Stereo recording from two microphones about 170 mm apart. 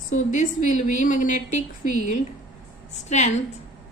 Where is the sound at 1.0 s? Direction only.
50° left (ahead or behind).